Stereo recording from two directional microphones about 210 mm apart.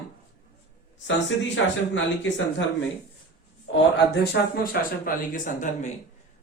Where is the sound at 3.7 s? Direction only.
60° left (ahead or behind).